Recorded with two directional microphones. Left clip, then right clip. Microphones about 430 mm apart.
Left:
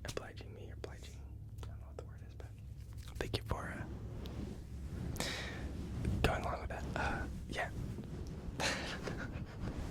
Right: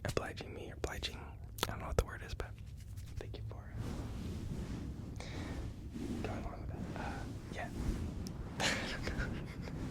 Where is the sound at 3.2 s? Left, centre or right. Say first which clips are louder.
Left 10 dB; left.